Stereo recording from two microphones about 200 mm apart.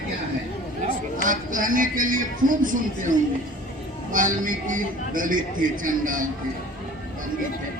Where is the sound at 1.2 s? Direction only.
40° right (ahead or behind).